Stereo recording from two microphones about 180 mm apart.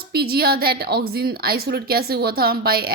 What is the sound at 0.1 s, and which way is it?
A woman's voice, 60° right (ahead or behind).